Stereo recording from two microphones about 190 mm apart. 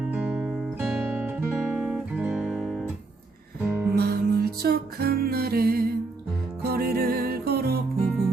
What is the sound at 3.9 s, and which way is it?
Music, 55° right (ahead or behind).